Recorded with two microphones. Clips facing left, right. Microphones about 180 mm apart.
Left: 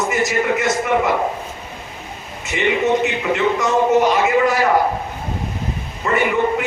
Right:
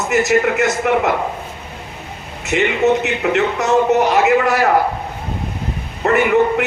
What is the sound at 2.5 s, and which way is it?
A man's voice, 70° right (ahead or behind).